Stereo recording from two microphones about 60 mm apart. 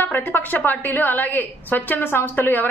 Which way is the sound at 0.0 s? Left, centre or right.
Left.